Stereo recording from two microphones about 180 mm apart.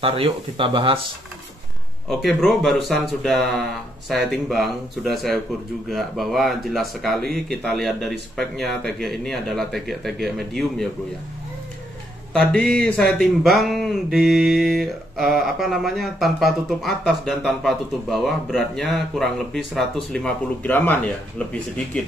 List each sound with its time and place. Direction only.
0.0 s speech: 30° right (ahead or behind)
2.0 s speech: centre (ahead or behind)
12.3 s speech: 5° left (ahead or behind)